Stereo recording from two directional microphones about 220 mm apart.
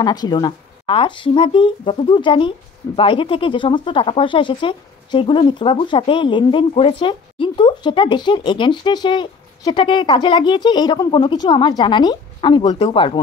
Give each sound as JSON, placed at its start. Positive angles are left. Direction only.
{"t": 0.0, "sound": "speech", "side_deg": 20}